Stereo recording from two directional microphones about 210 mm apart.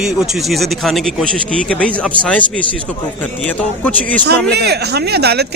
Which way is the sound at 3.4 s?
5° left (ahead or behind).